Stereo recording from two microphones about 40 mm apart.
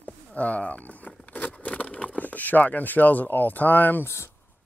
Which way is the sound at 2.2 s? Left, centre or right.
Left.